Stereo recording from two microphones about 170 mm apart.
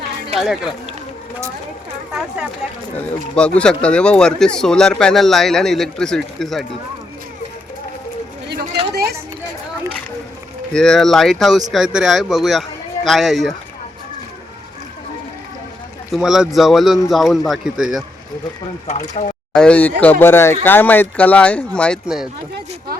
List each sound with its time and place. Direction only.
0.3 s speech: centre (ahead or behind)
2.9 s speech: 10° left (ahead or behind)
8.9 s a sound: 70° right (ahead or behind)
10.7 s speech: 5° left (ahead or behind)
16.1 s speech: centre (ahead or behind)
18.9 s speech: 45° left (ahead or behind)
19.5 s speech: 5° left (ahead or behind)
22.0 s speech: 5° right (ahead or behind)